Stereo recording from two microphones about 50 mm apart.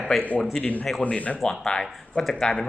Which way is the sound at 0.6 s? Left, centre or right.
Left.